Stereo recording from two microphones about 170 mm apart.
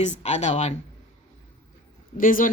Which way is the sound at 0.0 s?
40° left (ahead or behind).